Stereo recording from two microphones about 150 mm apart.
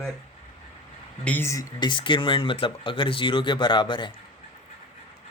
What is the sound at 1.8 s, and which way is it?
Speech, 30° left (ahead or behind).